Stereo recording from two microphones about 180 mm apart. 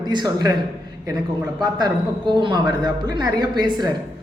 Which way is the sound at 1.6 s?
25° right (ahead or behind).